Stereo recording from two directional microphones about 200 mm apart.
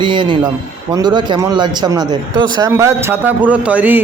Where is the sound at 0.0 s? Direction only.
25° right (ahead or behind).